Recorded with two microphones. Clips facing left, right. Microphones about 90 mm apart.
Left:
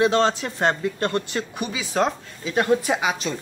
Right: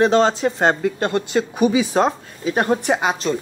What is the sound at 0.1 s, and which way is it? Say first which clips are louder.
Speech: right 5 dB; 30° right (ahead or behind).